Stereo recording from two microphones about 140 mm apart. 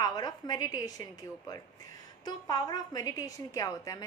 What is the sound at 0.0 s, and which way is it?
A woman's voice, 30° left (ahead or behind).